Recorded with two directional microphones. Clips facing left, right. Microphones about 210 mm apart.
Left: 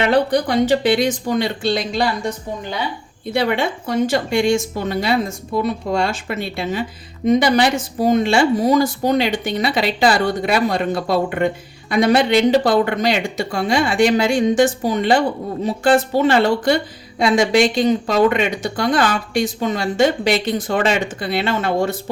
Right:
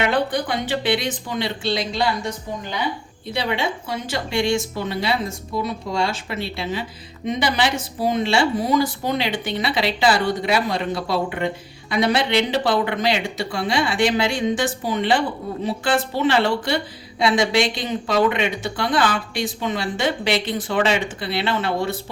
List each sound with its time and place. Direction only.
0.0 s a woman's voice: 40° left (ahead or behind)
3.3 s a woman's voice: 50° left (ahead or behind)